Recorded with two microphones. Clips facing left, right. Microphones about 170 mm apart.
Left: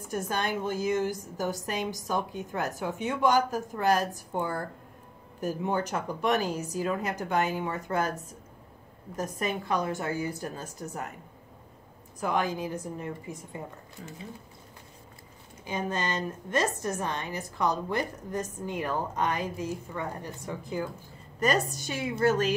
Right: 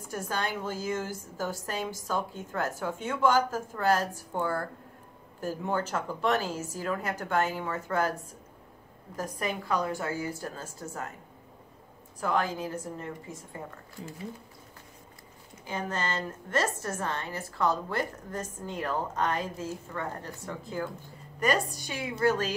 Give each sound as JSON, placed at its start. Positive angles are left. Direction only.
{"t": 0.1, "sound": "a woman's voice", "side_deg": 20}
{"t": 12.2, "sound": "a woman's voice", "side_deg": 15}
{"t": 15.6, "sound": "a woman's voice", "side_deg": 20}